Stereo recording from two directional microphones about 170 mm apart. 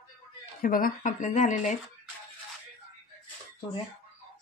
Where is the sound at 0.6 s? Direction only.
55° left (ahead or behind).